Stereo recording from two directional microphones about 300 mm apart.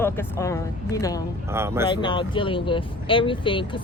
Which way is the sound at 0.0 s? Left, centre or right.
Centre.